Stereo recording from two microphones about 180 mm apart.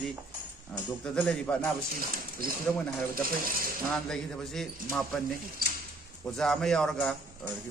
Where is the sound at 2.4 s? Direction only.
55° right (ahead or behind).